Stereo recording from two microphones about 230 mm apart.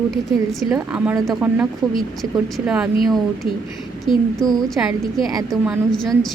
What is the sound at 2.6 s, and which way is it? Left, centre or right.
Speech, centre.